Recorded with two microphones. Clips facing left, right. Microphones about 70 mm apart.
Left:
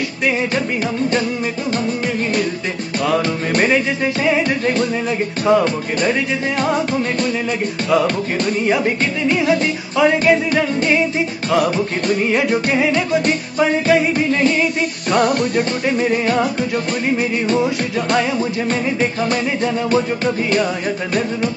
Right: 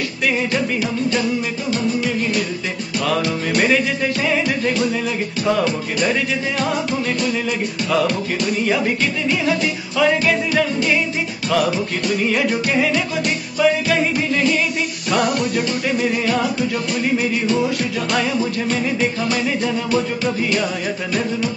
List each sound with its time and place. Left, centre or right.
1.7 s music: left
8.6 s music: centre
9.3 s music: left
9.9 s music: left
12.3 s music: left
13.2 s music: left
18.1 s music: left